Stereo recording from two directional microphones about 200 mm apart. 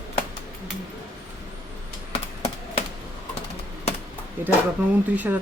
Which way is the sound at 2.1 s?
30° left (ahead or behind).